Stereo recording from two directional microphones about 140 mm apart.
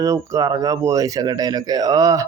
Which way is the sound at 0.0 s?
20° right (ahead or behind).